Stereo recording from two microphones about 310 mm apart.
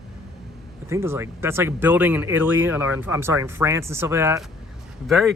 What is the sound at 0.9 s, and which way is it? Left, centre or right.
Speech, centre.